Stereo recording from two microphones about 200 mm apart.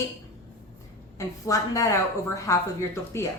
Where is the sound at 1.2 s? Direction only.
15° left (ahead or behind).